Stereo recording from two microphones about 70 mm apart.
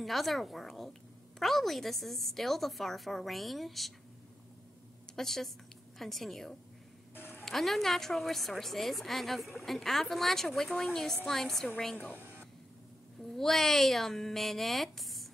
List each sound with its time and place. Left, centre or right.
0.0 s a woman's voice: centre
5.1 s a woman's voice: centre
7.2 s music: left
7.4 s a woman's voice: centre
13.2 s a woman's voice: centre